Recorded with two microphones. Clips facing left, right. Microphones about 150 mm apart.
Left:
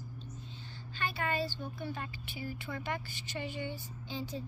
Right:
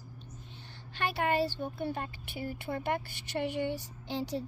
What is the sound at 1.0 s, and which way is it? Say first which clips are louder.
Speech: right 5 dB; 70° right (ahead or behind).